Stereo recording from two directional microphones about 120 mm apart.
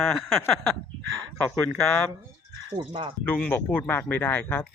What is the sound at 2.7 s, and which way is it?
Speech, 40° right (ahead or behind).